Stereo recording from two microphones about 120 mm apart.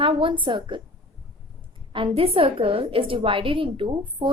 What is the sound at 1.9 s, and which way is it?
A woman's voice, 50° right (ahead or behind).